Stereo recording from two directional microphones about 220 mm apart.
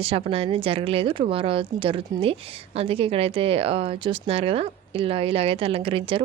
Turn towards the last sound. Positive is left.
turn(degrees=-25)  # may be behind; listen again after turning